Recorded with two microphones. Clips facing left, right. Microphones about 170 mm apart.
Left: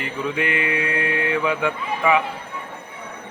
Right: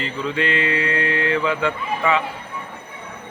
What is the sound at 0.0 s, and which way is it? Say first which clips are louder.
A man's voice: right 1 dB; 15° left (ahead or behind).